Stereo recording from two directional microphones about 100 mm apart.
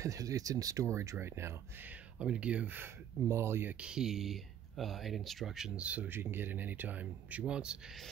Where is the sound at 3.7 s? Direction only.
10° right (ahead or behind).